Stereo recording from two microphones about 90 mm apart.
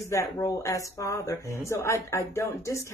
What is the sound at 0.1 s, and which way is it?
Speech, 35° left (ahead or behind).